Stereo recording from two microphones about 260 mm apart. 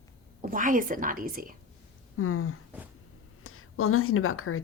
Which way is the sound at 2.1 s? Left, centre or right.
Left.